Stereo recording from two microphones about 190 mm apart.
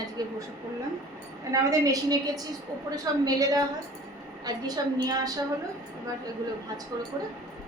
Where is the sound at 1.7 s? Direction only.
15° right (ahead or behind).